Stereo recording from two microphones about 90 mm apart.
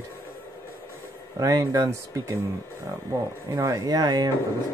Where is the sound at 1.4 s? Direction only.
40° right (ahead or behind).